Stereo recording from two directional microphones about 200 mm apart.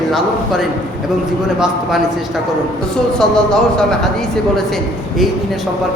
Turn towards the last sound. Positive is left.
turn(degrees=5)  # may be behind; listen again after turning